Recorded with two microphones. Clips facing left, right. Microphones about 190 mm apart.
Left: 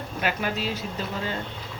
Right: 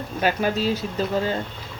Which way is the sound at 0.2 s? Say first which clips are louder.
Right 6 dB; 35° right (ahead or behind).